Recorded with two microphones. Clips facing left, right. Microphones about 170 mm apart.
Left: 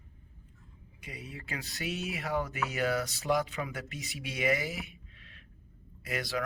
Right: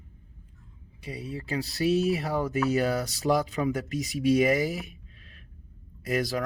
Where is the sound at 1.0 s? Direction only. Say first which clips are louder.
Right 9 dB; 35° right (ahead or behind).